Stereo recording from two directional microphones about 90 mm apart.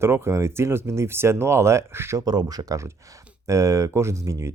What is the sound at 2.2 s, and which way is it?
Speech, 45° right (ahead or behind).